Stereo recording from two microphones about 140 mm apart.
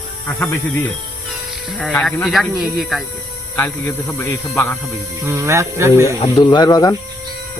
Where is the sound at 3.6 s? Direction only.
15° left (ahead or behind).